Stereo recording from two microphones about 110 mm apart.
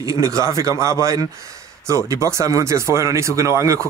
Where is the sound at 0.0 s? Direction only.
30° right (ahead or behind).